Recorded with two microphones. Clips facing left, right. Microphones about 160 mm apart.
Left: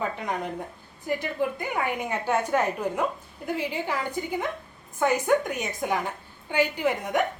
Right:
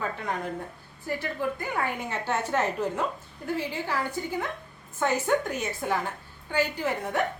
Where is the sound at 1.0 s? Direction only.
15° left (ahead or behind).